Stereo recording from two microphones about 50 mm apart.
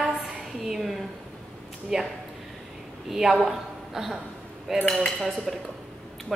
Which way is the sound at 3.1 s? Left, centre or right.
Centre.